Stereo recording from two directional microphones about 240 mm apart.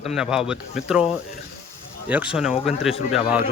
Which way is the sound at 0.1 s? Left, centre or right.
Centre.